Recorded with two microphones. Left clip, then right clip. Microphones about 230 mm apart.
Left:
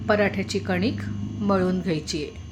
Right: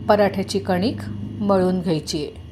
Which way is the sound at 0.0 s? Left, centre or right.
Centre.